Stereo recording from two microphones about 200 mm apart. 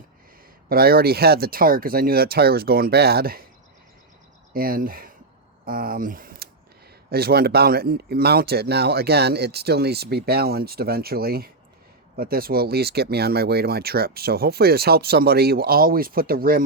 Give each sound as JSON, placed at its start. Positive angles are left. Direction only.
{"t": 0.7, "sound": "speech", "side_deg": -50}
{"t": 4.5, "sound": "speech", "side_deg": -45}